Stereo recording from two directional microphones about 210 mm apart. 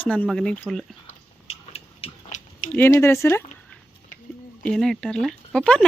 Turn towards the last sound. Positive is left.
turn(degrees=5)  # may be behind; listen again after turning